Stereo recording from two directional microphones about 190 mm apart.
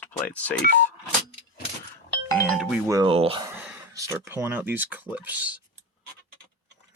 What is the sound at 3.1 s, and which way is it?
Speech, 30° right (ahead or behind).